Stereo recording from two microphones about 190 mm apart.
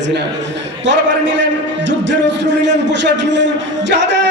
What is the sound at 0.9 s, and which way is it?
A man's voice, 70° right (ahead or behind).